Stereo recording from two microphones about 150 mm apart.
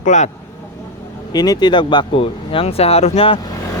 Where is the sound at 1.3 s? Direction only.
25° left (ahead or behind).